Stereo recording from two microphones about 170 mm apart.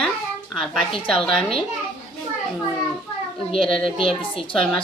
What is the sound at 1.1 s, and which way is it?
Speech, 5° left (ahead or behind).